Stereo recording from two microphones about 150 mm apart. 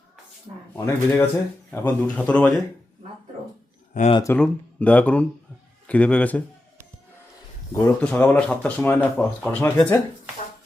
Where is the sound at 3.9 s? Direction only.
55° left (ahead or behind).